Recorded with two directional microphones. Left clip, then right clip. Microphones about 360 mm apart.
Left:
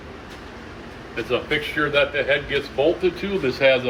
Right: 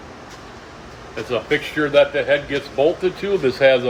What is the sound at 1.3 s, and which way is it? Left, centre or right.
Speech, right.